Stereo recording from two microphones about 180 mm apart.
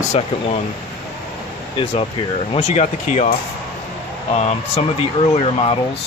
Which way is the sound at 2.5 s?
40° left (ahead or behind).